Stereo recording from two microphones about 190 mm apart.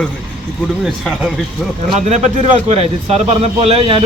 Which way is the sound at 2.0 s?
35° right (ahead or behind).